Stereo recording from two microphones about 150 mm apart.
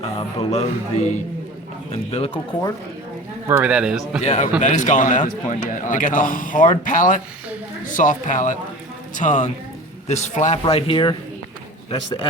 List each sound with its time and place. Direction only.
0.0 s music: 45° left (ahead or behind)
2.1 s speech: 40° left (ahead or behind)
3.6 s speech: 5° right (ahead or behind)
4.2 s music: 50° left (ahead or behind)
4.6 s a man's voice: 55° left (ahead or behind)
9.1 s music: 55° left (ahead or behind)
10.6 s speech: 40° left (ahead or behind)